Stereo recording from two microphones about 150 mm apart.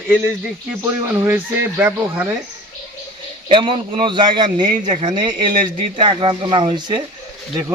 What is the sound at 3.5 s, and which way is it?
A man's voice, 35° right (ahead or behind).